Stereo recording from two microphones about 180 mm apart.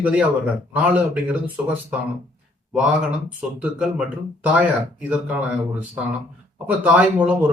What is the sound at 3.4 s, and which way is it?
Speech, 5° right (ahead or behind).